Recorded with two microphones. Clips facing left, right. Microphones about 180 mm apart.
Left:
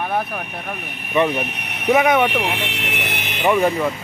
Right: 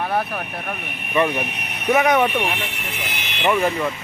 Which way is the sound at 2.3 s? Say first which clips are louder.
Left 1 dB; 80° left.